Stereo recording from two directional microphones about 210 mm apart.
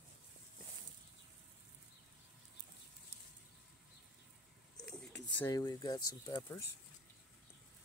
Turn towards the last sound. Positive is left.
turn(degrees=10)  # may be behind; listen again after turning